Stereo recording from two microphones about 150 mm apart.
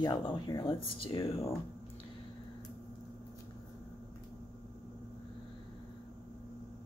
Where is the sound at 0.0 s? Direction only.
30° left (ahead or behind).